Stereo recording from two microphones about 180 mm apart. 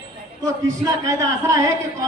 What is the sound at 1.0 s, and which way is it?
Speech, 15° right (ahead or behind).